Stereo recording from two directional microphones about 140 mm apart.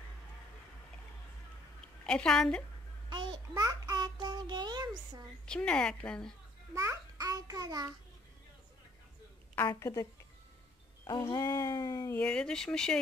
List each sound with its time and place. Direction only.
2.0 s speech: 5° left (ahead or behind)
3.1 s a sound: 30° right (ahead or behind)
5.4 s a woman's voice: 5° left (ahead or behind)
6.7 s a child's voice: 20° right (ahead or behind)
9.7 s speech: 25° left (ahead or behind)
11.1 s speech: 25° left (ahead or behind)
12.2 s speech: 5° left (ahead or behind)